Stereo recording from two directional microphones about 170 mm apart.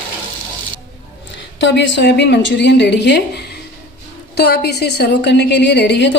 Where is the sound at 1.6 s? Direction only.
90° left.